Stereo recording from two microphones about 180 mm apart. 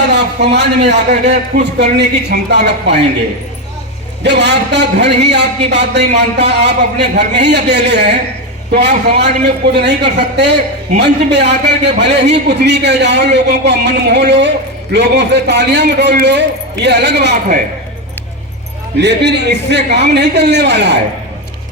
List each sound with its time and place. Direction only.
0.1 s a man's voice: 70° right (ahead or behind)
4.2 s a man's voice: 70° right (ahead or behind)
8.8 s a man's voice: 35° right (ahead or behind)
9.2 s a man's voice: 70° right (ahead or behind)
18.9 s a man's voice: 70° right (ahead or behind)